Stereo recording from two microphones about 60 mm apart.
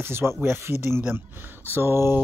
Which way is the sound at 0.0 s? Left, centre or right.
Right.